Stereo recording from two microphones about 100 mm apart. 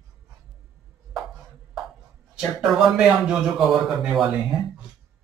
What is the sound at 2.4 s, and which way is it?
Speech, 5° right (ahead or behind).